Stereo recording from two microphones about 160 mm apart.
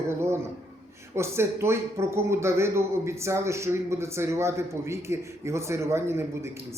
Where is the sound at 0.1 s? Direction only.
15° right (ahead or behind).